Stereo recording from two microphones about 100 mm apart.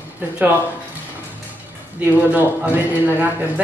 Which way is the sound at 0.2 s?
15° right (ahead or behind).